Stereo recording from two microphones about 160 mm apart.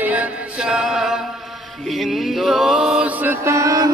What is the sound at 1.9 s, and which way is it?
Mantra, centre (ahead or behind).